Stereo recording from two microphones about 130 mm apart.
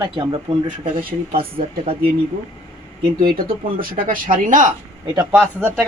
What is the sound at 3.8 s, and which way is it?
Speech, 90° right.